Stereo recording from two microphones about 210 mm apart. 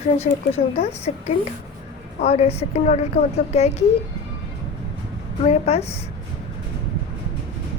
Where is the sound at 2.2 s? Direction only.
30° left (ahead or behind).